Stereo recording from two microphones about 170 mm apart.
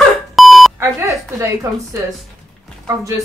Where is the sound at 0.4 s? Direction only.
Centre (ahead or behind).